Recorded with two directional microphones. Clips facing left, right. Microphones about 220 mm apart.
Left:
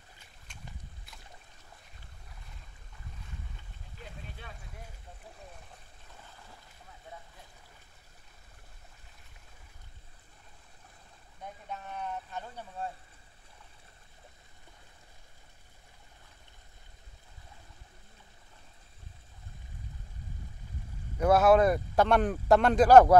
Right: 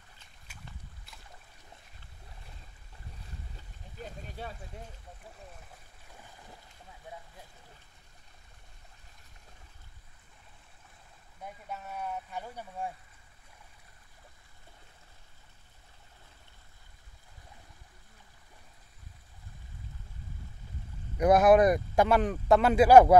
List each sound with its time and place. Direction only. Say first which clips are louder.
3.5 s a sound: right 5 dB; 35° right (ahead or behind)
11.4 s speech: even; 5° right (ahead or behind)
21.2 s speech: right 1 dB; 15° right (ahead or behind)
22.2 s speech: even; centre (ahead or behind)